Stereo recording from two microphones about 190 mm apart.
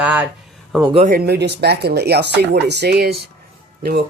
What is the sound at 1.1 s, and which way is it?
Speech, 55° right (ahead or behind).